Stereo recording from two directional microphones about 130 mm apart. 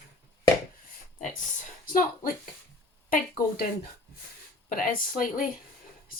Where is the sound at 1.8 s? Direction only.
90° left.